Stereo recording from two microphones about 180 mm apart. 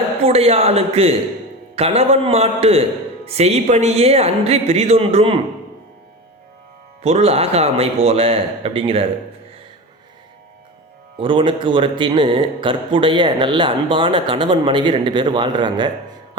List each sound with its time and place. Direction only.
0.2 s speech: 35° right (ahead or behind)
7.0 s speech: 35° right (ahead or behind)
11.2 s speech: 30° right (ahead or behind)